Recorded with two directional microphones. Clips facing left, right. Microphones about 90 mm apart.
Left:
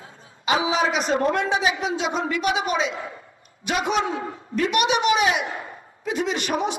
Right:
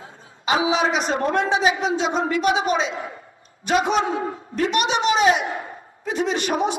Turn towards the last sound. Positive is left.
turn(degrees=-35)  # may be behind; listen again after turning